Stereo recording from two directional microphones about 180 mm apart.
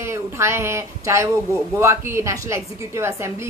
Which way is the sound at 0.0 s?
15° right (ahead or behind).